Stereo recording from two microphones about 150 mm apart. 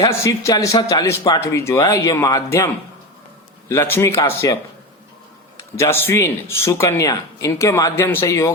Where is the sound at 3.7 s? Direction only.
15° left (ahead or behind).